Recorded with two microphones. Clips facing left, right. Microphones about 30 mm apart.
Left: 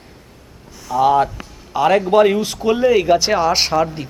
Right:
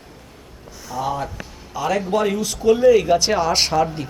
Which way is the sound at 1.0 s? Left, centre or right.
Left.